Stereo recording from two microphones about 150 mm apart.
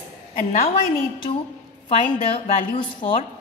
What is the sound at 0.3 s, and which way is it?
Speech, 70° left (ahead or behind).